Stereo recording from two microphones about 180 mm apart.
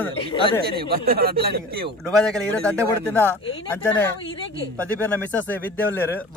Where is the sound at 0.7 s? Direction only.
55° right (ahead or behind).